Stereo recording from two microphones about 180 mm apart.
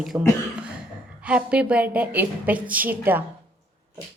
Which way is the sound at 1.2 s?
5° right (ahead or behind).